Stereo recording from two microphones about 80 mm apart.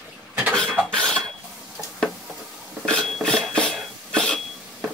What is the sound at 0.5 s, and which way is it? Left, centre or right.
Filing, centre.